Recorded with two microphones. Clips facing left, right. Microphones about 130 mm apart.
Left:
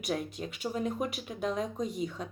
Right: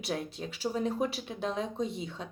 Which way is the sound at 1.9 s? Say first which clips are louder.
Left 4 dB; 40° left (ahead or behind).